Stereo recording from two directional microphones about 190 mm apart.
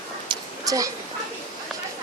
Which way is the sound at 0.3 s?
20° right (ahead or behind).